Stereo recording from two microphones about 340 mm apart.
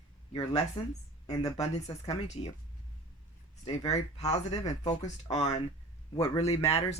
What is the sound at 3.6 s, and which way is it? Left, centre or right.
Speech, centre.